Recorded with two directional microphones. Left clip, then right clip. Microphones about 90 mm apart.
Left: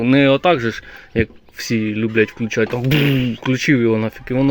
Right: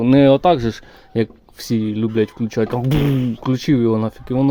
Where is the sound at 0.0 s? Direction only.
65° right (ahead or behind).